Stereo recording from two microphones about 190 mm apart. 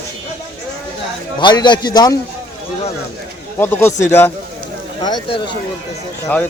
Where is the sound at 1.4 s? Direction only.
25° left (ahead or behind).